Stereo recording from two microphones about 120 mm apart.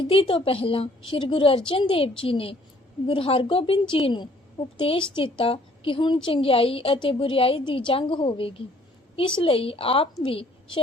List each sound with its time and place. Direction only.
0.0 s a woman's voice: 50° left (ahead or behind)